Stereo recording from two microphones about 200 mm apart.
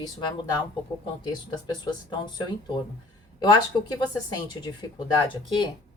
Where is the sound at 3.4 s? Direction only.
20° left (ahead or behind).